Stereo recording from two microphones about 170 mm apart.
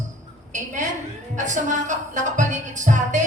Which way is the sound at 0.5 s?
45° right (ahead or behind).